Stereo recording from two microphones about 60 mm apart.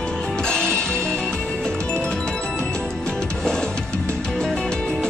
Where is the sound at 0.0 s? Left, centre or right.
Centre.